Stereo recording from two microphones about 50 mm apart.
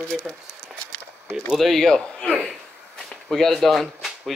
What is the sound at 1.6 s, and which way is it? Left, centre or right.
Speech, centre.